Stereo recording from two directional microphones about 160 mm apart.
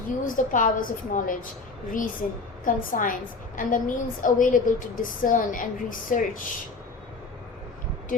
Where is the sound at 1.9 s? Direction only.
60° left (ahead or behind).